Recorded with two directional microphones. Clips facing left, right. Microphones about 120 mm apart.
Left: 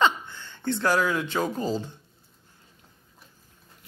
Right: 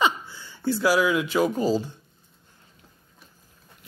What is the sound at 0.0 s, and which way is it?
Speech, 10° right (ahead or behind).